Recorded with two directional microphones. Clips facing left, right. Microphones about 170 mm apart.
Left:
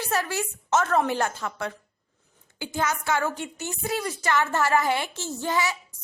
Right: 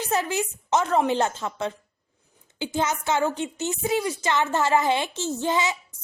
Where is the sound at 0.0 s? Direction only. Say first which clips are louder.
Right 2 dB; 20° right (ahead or behind).